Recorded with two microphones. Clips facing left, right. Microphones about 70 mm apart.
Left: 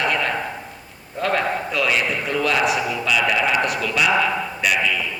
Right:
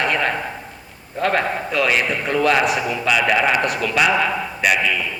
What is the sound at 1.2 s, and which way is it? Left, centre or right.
A man's voice, right.